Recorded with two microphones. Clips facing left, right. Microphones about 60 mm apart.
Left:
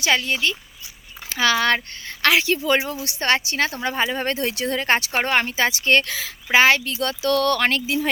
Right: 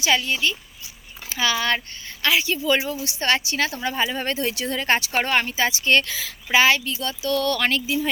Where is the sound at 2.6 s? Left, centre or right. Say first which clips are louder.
Left 1 dB; left.